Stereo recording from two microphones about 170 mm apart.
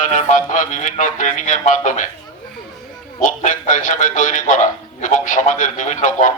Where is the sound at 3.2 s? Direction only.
50° left (ahead or behind).